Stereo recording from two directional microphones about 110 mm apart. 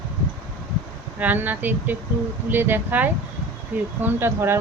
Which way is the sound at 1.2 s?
15° right (ahead or behind).